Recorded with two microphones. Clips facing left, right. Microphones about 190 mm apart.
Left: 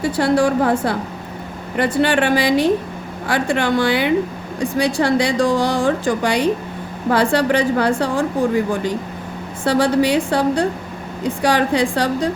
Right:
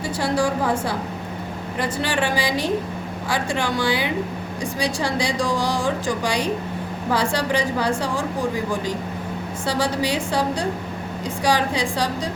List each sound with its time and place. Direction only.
0.2 s a woman's voice: 60° left (ahead or behind)
9.6 s a woman's voice: 60° left (ahead or behind)